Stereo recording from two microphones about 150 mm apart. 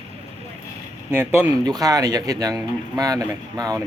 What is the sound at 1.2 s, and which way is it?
Speech, 15° right (ahead or behind).